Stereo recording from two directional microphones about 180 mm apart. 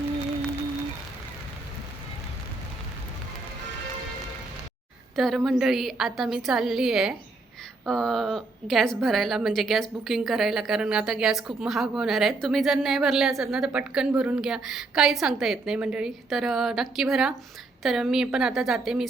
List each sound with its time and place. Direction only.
5.1 s a woman's voice: centre (ahead or behind)